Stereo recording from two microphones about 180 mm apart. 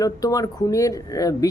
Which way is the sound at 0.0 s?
20° left (ahead or behind).